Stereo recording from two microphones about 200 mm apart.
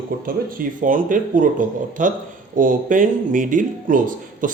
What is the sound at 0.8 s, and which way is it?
Speech, 40° right (ahead or behind).